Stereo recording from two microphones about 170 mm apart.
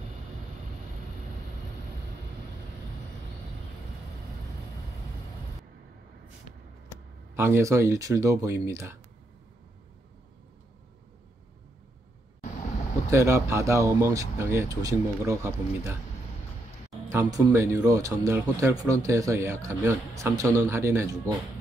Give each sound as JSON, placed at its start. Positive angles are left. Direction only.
{"t": 7.3, "sound": "speech", "side_deg": -15}
{"t": 13.1, "sound": "speech", "side_deg": -15}
{"t": 17.1, "sound": "speech", "side_deg": -15}